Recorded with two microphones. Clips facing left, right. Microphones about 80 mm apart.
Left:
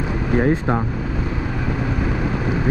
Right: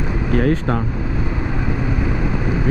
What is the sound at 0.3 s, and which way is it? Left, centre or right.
Speech, left.